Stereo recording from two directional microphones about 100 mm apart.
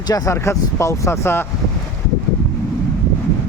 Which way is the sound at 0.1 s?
30° left (ahead or behind).